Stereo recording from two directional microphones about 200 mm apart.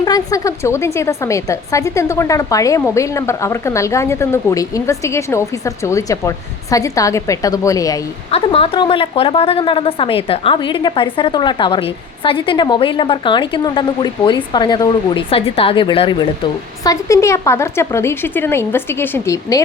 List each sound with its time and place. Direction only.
0.0 s speech: 20° left (ahead or behind)
8.3 s a woman's voice: 30° left (ahead or behind)